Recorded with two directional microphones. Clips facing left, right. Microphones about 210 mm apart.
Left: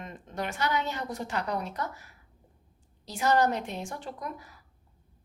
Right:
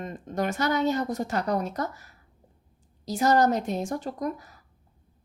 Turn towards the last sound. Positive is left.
turn(degrees=-40)  # may be behind; listen again after turning